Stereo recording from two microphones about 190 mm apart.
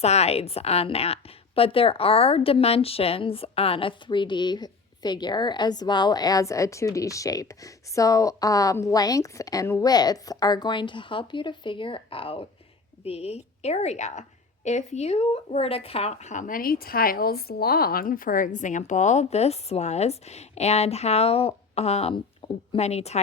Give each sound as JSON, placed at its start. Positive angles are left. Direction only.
{"t": 0.0, "sound": "a woman's voice", "side_deg": 35}